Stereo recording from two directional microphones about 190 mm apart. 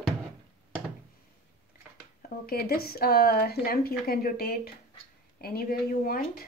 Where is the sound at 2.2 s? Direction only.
55° left (ahead or behind).